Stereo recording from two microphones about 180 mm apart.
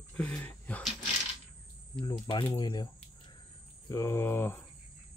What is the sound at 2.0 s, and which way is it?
Speech, 25° left (ahead or behind).